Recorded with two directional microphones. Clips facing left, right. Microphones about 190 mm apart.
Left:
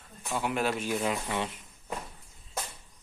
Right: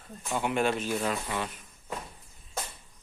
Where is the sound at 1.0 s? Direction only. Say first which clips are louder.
Left 1 dB; 20° left (ahead or behind).